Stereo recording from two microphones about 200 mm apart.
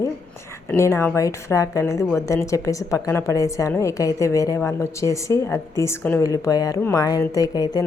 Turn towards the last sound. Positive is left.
turn(degrees=20)  # may be behind; listen again after turning